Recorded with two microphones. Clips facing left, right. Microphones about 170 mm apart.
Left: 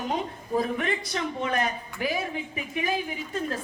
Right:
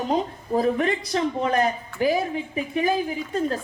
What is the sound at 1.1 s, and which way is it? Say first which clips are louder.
A woman's voice: right 7 dB; 35° right (ahead or behind).